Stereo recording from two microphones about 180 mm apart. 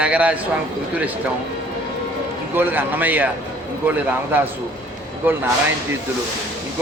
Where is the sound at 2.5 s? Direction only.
10° right (ahead or behind).